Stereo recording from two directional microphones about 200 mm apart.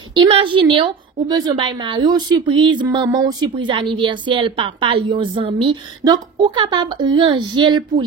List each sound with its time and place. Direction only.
0.1 s a woman's voice: 25° right (ahead or behind)